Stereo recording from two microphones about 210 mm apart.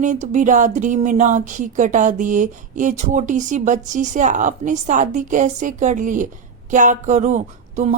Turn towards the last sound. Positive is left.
turn(degrees=-35)  # may be behind; listen again after turning